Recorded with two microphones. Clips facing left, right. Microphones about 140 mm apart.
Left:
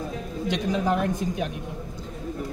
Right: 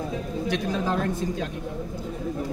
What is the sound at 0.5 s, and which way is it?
A woman's voice, 15° left (ahead or behind).